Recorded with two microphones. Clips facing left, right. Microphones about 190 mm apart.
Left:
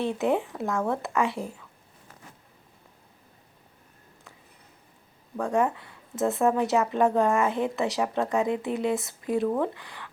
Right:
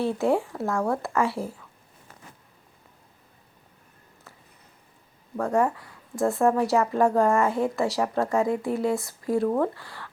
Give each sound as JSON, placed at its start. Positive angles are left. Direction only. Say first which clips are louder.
{"t": 0.0, "sound": "speech", "louder": "right 2 dB", "side_deg": 20}
{"t": 5.5, "sound": "speech", "louder": "right 1 dB", "side_deg": 20}